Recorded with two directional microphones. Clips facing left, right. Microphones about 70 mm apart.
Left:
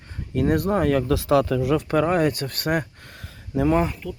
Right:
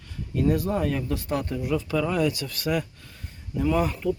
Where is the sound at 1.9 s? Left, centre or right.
Left.